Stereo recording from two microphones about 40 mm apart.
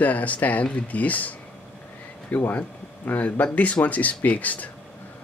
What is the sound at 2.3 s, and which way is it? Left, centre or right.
Speech, left.